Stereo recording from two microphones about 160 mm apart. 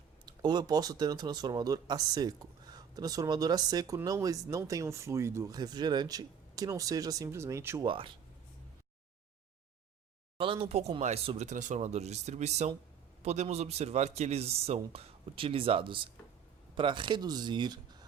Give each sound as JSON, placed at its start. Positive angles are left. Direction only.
{"t": 0.3, "sound": "speech", "side_deg": -25}
{"t": 7.9, "sound": "a man's voice", "side_deg": -35}
{"t": 10.3, "sound": "a man's voice", "side_deg": -35}